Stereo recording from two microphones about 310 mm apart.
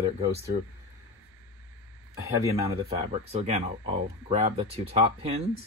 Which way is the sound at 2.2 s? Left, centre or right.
Centre.